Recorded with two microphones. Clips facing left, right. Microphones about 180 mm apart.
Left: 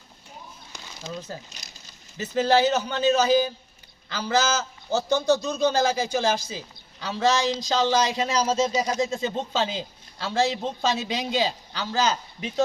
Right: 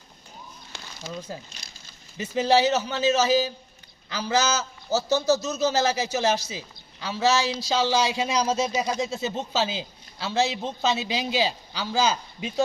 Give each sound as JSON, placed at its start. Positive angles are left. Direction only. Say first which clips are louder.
{"t": 1.3, "sound": "a man's voice", "louder": "even", "side_deg": -10}